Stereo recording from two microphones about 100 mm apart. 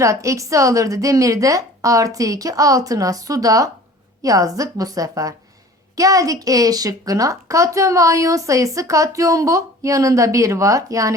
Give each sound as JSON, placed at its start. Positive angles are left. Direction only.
{"t": 0.0, "sound": "a woman's voice", "side_deg": -30}